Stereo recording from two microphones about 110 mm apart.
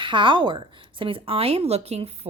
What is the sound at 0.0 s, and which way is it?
Speech, 50° right (ahead or behind).